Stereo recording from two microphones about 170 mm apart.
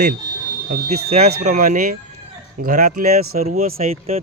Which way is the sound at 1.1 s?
45° right (ahead or behind).